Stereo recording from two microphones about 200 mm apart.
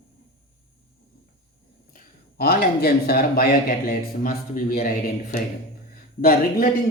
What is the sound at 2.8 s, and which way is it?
A man's voice, 50° left (ahead or behind).